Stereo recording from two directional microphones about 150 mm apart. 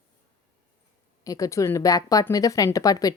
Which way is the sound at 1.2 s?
20° left (ahead or behind).